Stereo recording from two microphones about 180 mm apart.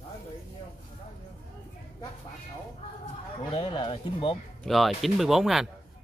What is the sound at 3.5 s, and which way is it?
Speech, 30° left (ahead or behind).